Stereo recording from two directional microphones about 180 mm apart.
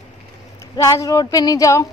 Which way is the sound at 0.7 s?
20° left (ahead or behind).